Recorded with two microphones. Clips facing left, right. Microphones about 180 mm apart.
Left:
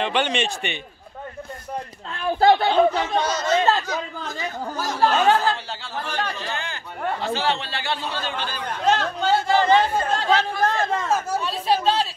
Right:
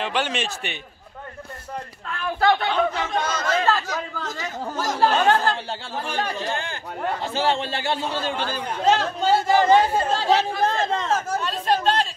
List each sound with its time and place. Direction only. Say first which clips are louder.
0.0 s speech: left 3 dB; 5° right (ahead or behind)
2.0 s speech: left 3 dB; 25° left (ahead or behind)
5.1 s speech: left 2 dB; 10° left (ahead or behind)
6.0 s speech: right 2 dB; 10° right (ahead or behind)
6.5 s a man's voice: right 2 dB; 45° right (ahead or behind)
8.6 s speech: right 1 dB; 5° right (ahead or behind)